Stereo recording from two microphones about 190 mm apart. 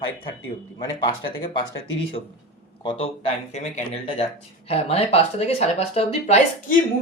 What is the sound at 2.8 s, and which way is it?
Speech, 30° left (ahead or behind).